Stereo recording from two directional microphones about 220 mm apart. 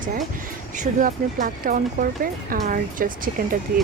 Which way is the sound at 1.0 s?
35° right (ahead or behind).